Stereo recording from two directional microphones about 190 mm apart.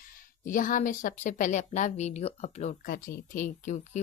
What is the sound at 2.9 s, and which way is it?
Speech, 50° left (ahead or behind).